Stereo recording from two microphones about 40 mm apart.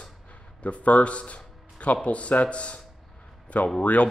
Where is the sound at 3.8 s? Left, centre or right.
Left.